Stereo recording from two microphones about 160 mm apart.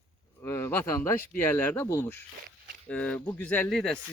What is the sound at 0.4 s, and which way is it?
Speech, 15° left (ahead or behind).